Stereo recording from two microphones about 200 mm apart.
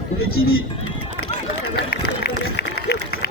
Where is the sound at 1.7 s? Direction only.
60° left (ahead or behind).